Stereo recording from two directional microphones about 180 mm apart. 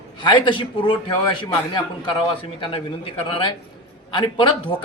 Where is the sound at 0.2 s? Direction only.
25° left (ahead or behind).